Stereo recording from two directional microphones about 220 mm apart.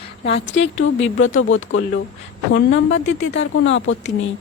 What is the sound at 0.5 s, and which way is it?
Speech, 60° left (ahead or behind).